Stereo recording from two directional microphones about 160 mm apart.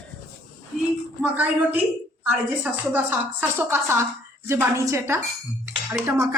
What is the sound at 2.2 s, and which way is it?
A woman's voice, 10° right (ahead or behind).